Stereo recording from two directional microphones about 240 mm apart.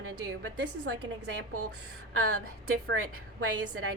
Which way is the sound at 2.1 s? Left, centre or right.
Right.